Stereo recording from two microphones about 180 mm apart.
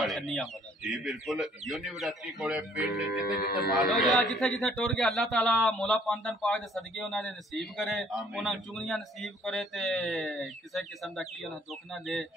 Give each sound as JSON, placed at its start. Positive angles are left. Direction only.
{"t": 0.0, "sound": "chicken", "side_deg": 0}
{"t": 1.0, "sound": "speech", "side_deg": 0}
{"t": 3.1, "sound": "speech", "side_deg": 55}
{"t": 4.2, "sound": "speech", "side_deg": 5}